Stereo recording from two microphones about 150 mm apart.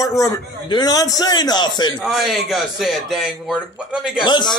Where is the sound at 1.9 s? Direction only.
Centre (ahead or behind).